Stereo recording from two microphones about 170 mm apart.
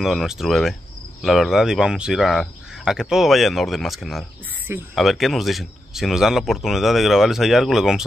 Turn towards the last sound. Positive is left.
turn(degrees=-5)  # may be behind; listen again after turning